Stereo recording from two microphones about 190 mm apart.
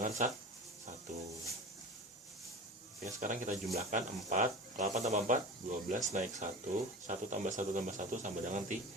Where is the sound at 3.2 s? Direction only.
40° right (ahead or behind).